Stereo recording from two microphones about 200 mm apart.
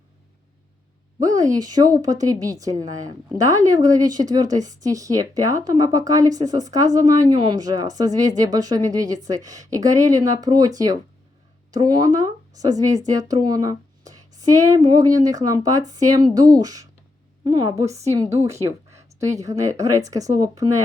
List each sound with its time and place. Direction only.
1.2 s a woman's voice: 15° right (ahead or behind)
11.7 s a woman's voice: 20° right (ahead or behind)